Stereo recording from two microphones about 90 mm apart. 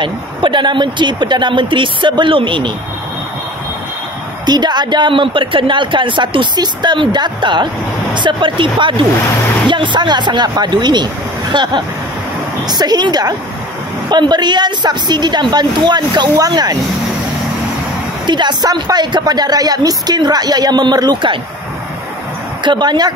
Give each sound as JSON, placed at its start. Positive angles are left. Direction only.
{"t": 0.0, "sound": "speech", "side_deg": -60}
{"t": 4.5, "sound": "a woman's voice", "side_deg": -55}
{"t": 18.2, "sound": "a woman's voice", "side_deg": -55}
{"t": 22.6, "sound": "a woman's voice", "side_deg": -55}